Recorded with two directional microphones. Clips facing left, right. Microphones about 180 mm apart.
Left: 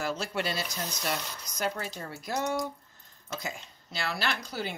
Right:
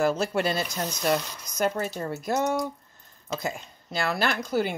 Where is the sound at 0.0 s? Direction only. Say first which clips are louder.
Right 8 dB; 50° right (ahead or behind).